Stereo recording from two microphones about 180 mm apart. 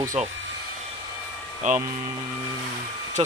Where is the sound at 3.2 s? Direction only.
35° right (ahead or behind).